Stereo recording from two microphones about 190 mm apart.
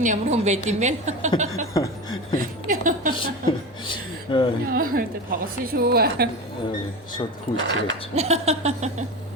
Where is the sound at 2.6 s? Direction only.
45° right (ahead or behind).